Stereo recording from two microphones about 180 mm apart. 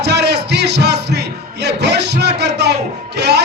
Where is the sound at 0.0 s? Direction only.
70° right (ahead or behind).